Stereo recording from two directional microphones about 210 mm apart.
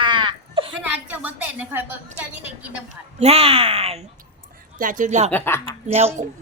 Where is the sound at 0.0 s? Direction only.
20° right (ahead or behind).